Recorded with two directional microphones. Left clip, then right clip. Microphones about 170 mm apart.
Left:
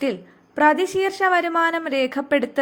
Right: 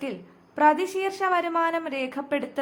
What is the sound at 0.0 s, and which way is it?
A woman's voice, 20° left (ahead or behind).